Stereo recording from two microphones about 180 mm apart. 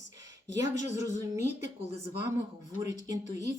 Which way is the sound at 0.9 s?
20° right (ahead or behind).